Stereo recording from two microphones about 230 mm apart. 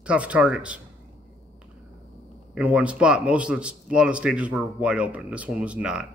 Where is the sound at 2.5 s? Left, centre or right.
Centre.